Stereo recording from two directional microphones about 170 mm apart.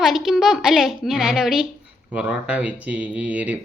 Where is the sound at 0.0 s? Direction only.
Centre (ahead or behind).